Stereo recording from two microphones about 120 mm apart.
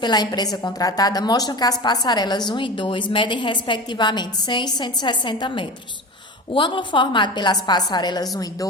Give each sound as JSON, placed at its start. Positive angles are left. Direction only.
{"t": 0.0, "sound": "a woman's voice", "side_deg": 35}